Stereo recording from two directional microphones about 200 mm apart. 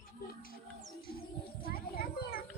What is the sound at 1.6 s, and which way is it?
Children playing, 50° left (ahead or behind).